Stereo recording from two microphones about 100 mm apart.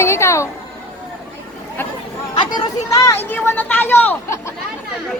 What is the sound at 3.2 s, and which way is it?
Speech, 20° left (ahead or behind).